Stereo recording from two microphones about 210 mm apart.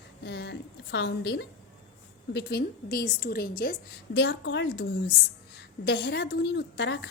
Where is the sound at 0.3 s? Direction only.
55° left (ahead or behind).